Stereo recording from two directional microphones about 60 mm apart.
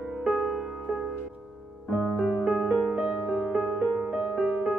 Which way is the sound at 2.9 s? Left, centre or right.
Right.